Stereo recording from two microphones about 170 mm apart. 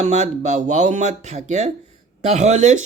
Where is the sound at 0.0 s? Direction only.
40° right (ahead or behind).